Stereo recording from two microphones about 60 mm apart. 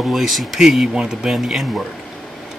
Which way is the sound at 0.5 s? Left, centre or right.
Centre.